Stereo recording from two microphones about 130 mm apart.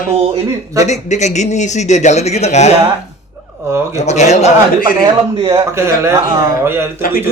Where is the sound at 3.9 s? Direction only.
60° left (ahead or behind); by 4.9 s 75° left (ahead or behind).